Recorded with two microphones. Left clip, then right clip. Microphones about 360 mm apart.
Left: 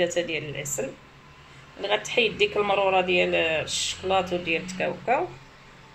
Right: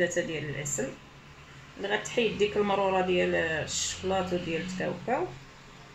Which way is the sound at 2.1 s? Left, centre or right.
Left.